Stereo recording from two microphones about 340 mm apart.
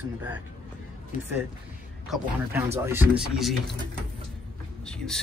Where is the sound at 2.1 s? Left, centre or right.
Centre.